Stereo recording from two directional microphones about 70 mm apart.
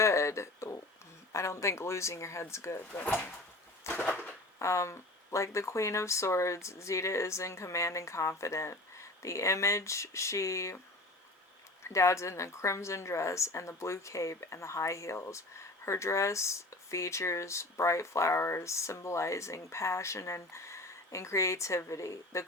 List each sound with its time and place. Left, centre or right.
0.0 s a sound: left
1.3 s a woman's voice: left
3.0 s speech: left
3.9 s a sound: centre
4.6 s a woman's voice: left
11.8 s a woman's voice: left